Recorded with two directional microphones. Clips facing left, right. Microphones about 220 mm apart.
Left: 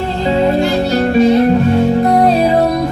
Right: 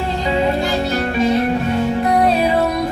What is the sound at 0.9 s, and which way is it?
Music, 35° left (ahead or behind).